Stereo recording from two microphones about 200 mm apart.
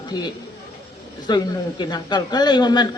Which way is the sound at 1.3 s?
20° left (ahead or behind).